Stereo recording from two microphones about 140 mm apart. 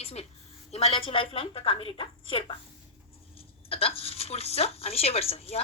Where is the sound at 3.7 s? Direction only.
45° left (ahead or behind).